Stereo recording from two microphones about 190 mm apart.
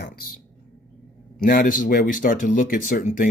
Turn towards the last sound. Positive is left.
turn(degrees=45)  # may be behind; listen again after turning